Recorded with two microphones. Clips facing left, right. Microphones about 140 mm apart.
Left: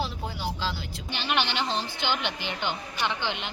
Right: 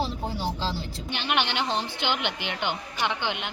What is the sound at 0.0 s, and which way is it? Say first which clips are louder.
Vehicle: right 3 dB; 30° right (ahead or behind).